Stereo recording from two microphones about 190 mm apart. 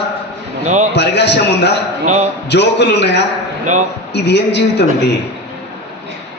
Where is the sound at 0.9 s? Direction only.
65° left (ahead or behind).